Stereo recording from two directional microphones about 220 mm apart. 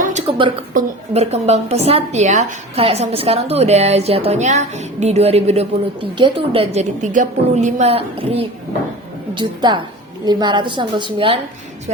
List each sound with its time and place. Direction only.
0.0 s a sound: 30° right (ahead or behind)
0.7 s a woman's voice: 35° right (ahead or behind)
6.7 s a woman's voice: 35° right (ahead or behind)